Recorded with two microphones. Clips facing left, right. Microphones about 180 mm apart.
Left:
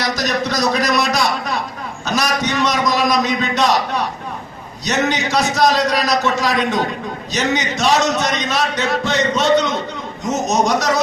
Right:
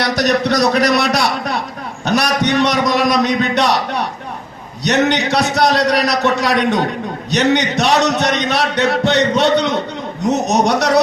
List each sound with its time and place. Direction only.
0.0 s a man's voice: 65° right (ahead or behind)
4.8 s a man's voice: 65° right (ahead or behind)